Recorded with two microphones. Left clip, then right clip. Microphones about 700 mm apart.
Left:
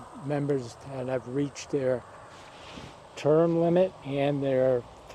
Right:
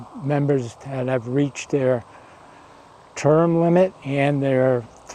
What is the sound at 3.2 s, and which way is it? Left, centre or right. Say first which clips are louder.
Speech: right 6 dB; right.